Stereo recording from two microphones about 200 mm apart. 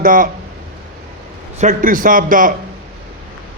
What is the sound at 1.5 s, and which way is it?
Speech, 40° right (ahead or behind).